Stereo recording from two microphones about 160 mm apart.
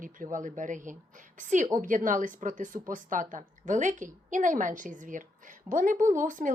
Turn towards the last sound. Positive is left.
turn(degrees=-55)  # may be behind; listen again after turning